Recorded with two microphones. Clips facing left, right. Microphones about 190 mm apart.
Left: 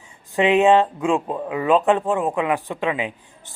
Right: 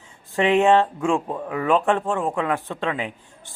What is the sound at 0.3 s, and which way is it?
A man's voice, 15° left (ahead or behind).